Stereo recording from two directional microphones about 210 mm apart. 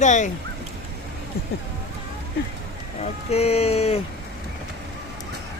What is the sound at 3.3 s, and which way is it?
Speech, 30° left (ahead or behind).